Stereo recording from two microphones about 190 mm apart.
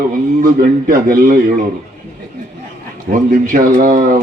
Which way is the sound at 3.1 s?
45° right (ahead or behind).